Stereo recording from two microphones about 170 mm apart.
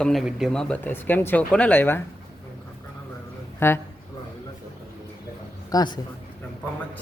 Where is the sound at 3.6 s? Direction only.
15° left (ahead or behind).